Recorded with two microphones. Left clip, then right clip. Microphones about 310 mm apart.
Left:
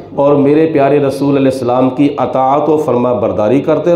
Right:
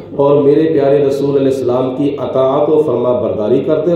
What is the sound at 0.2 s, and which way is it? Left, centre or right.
A man's voice, left.